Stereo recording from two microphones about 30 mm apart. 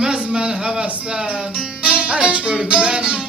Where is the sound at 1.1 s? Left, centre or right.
Right.